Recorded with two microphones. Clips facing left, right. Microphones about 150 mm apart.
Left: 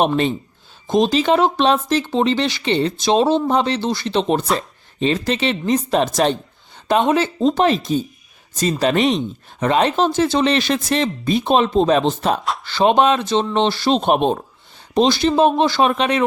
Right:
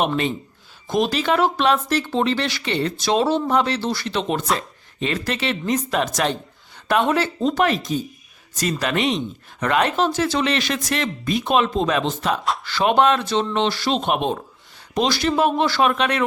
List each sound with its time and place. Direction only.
0.0 s speech: 30° left (ahead or behind)
0.9 s speech: 20° left (ahead or behind)
14.9 s speech: 25° left (ahead or behind)